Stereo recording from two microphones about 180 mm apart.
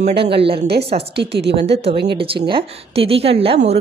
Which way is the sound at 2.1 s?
30° right (ahead or behind).